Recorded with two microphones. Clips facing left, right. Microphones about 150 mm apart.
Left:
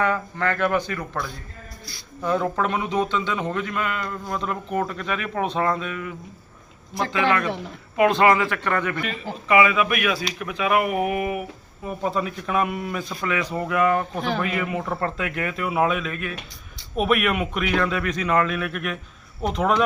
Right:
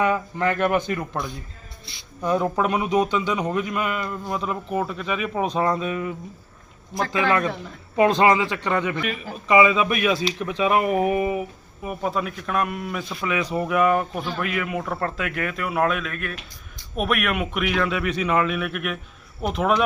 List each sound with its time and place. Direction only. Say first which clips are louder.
0.0 s a man's voice: right 2 dB; 15° right (ahead or behind)
5.5 s a man's voice: right 3 dB; 20° right (ahead or behind)
7.3 s a man's voice: even; 20° right (ahead or behind)
11.9 s a man's voice: left 1 dB; 5° right (ahead or behind)
13.2 s a man's voice: right 2 dB; 10° right (ahead or behind)